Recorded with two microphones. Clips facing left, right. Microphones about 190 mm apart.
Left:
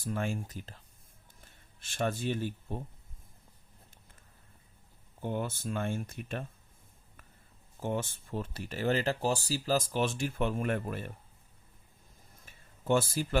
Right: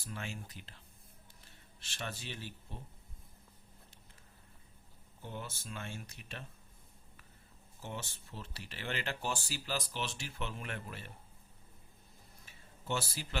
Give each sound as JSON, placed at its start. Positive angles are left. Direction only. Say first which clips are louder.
{"t": 0.0, "sound": "speech", "louder": "left 10 dB", "side_deg": 50}
{"t": 5.2, "sound": "speech", "louder": "left 11 dB", "side_deg": 55}
{"t": 7.8, "sound": "speech", "louder": "left 11 dB", "side_deg": 50}
{"t": 12.5, "sound": "a sound", "louder": "left 10 dB", "side_deg": 50}